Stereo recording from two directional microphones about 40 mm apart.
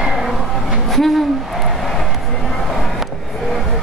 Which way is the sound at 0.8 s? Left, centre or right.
Centre.